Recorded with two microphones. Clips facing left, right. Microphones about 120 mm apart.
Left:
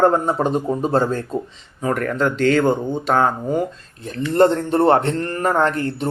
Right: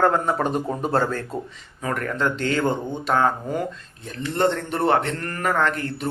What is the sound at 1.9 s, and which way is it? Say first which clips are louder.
Speech: left 4 dB; 40° left (ahead or behind).